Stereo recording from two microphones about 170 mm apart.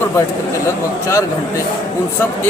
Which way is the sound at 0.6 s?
15° left (ahead or behind).